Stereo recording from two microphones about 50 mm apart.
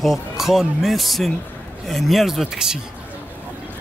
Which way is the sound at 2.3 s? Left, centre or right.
Centre.